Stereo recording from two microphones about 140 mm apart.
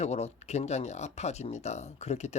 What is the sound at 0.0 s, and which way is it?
Speech, 50° left (ahead or behind).